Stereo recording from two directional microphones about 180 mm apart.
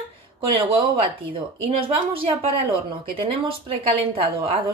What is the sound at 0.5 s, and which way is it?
A woman's voice, 30° right (ahead or behind).